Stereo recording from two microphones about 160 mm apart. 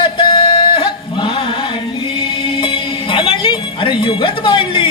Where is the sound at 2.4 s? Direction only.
35° left (ahead or behind).